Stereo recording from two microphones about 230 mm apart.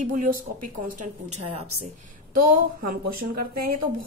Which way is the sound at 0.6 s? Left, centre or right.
Right.